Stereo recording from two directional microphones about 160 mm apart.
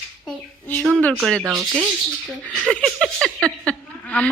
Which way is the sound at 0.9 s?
Centre (ahead or behind).